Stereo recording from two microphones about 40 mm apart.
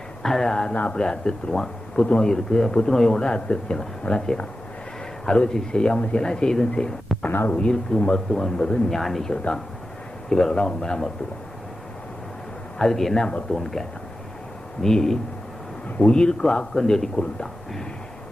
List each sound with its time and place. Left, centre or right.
0.2 s a sound: centre
0.7 s a man's voice: left
5.2 s speech: centre
7.3 s speech: left
7.7 s a man's voice: left
12.8 s a man's voice: centre
16.0 s a man's voice: left